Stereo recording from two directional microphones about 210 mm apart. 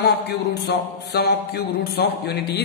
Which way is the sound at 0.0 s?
55° left (ahead or behind).